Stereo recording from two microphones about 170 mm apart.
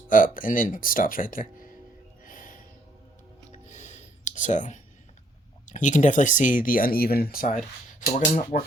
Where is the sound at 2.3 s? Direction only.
50° left (ahead or behind).